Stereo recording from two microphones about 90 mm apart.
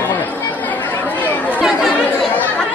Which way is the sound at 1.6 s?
5° right (ahead or behind).